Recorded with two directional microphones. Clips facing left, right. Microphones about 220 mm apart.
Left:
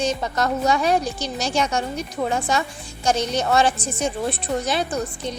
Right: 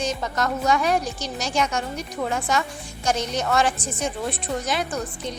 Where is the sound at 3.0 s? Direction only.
30° left (ahead or behind).